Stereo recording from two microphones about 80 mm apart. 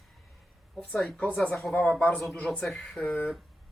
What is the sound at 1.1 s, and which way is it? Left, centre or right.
Speech, centre.